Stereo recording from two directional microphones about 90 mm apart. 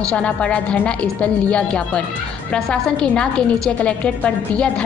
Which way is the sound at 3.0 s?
10° left (ahead or behind).